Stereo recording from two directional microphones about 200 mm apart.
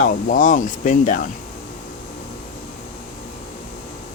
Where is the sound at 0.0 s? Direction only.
40° left (ahead or behind).